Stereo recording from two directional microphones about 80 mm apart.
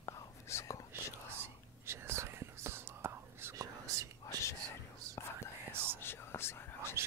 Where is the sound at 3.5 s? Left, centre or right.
Right.